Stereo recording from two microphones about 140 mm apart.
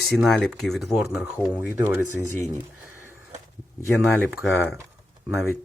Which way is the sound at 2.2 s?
20° left (ahead or behind).